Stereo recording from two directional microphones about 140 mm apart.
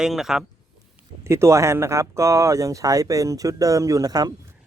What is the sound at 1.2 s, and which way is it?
Speech, 20° right (ahead or behind).